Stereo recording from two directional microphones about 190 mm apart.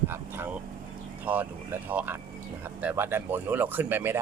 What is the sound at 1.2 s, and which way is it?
Speech, 10° right (ahead or behind).